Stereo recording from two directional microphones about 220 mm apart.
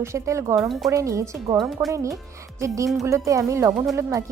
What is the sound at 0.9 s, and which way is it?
Speech, 15° right (ahead or behind).